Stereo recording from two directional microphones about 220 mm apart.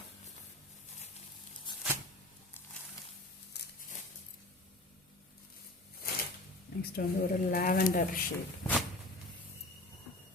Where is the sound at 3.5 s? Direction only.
50° left (ahead or behind).